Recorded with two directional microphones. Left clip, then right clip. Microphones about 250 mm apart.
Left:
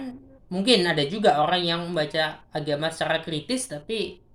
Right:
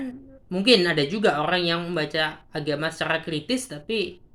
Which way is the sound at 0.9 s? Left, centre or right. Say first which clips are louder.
Left 1 dB; left.